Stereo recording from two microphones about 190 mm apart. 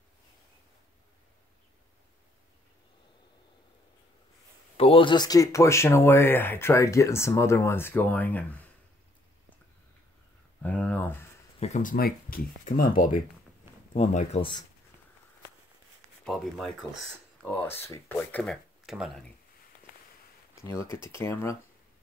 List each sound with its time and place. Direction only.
4.7 s speech: 30° left (ahead or behind); by 8.6 s 10° left (ahead or behind)
10.6 s speech: 5° left (ahead or behind)
11.6 s speech: 40° left (ahead or behind)
16.3 s speech: centre (ahead or behind)
20.6 s speech: 15° left (ahead or behind)